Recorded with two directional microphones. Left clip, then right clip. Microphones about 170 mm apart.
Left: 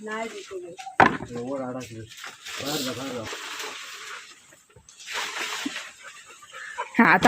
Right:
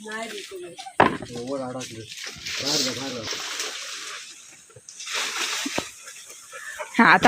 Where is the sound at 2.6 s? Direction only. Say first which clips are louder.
Right 5 dB; 15° left (ahead or behind).